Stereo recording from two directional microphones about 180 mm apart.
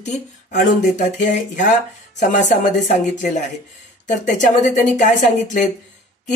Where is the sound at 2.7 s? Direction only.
45° left (ahead or behind).